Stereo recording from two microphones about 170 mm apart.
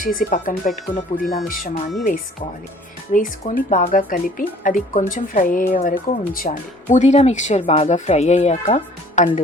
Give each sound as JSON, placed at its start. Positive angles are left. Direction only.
{"t": 0.0, "sound": "speech", "side_deg": 55}
{"t": 3.1, "sound": "speech", "side_deg": 50}
{"t": 6.9, "sound": "speech", "side_deg": 45}